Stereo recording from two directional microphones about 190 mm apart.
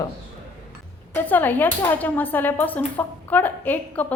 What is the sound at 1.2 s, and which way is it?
A woman's voice, 10° left (ahead or behind).